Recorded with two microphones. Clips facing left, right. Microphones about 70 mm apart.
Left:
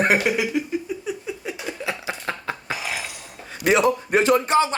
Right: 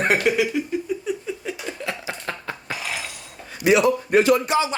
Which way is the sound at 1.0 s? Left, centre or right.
Centre.